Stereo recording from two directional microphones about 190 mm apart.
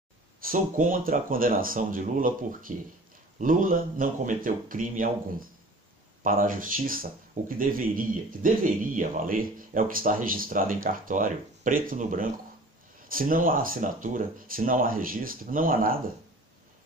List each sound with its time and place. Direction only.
0.4 s speech: 45° right (ahead or behind)